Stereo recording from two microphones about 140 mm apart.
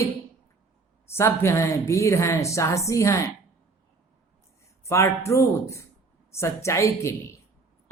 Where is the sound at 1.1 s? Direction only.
20° left (ahead or behind).